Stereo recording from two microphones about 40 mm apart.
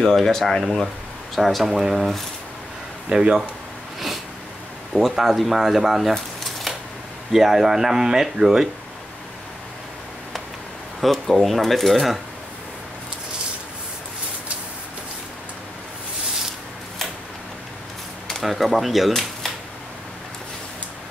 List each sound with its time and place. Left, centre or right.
0.0 s speech: centre
3.1 s speech: right
4.9 s speech: centre
6.1 s a sound: centre
7.3 s speech: centre
11.0 s speech: centre
18.3 s speech: centre